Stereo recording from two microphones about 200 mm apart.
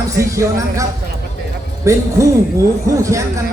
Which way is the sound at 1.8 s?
15° right (ahead or behind).